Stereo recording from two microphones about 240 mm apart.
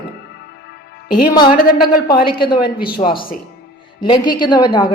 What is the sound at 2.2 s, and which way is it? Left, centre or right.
A woman's voice, centre.